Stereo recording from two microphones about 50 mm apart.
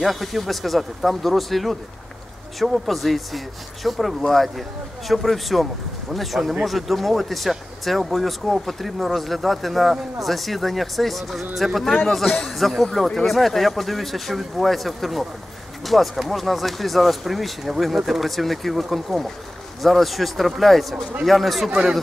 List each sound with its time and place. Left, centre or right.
0.0 s speech: centre
21.6 s speech: centre